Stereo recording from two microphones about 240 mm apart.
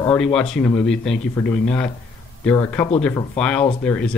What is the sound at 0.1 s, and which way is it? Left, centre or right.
Speech, centre.